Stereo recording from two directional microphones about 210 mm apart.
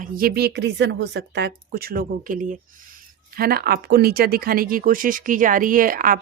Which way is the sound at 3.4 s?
45° right (ahead or behind).